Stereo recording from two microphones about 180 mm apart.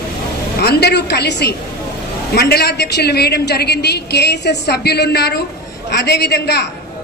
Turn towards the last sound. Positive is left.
turn(degrees=65)  # may be behind; listen again after turning